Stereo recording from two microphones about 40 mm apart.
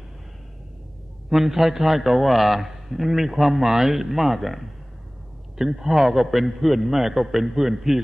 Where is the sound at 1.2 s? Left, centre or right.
Centre.